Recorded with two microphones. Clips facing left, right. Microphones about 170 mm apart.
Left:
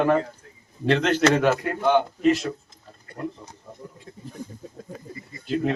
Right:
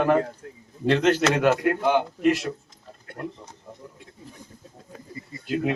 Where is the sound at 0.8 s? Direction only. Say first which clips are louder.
Even; 5° right (ahead or behind).